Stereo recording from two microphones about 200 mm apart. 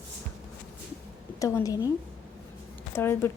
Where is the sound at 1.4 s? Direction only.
15° left (ahead or behind).